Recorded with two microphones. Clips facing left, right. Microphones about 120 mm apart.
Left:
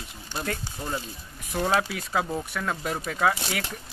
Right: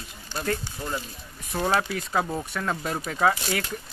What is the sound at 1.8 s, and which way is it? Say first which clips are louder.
Speech: right 1 dB; 5° left (ahead or behind).